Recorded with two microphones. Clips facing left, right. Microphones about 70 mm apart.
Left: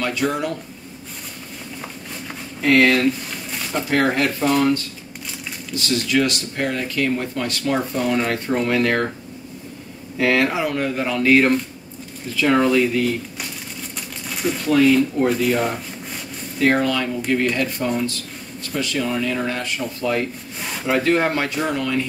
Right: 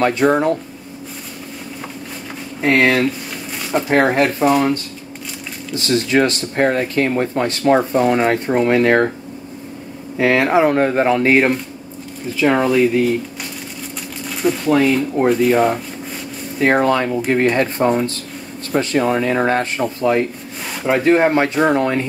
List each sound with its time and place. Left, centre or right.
0.0 s speech: right
2.6 s speech: right
3.9 s speech: right
5.8 s speech: right
10.1 s speech: right
14.3 s a sound: centre
15.2 s speech: right
16.5 s speech: right
21.5 s speech: right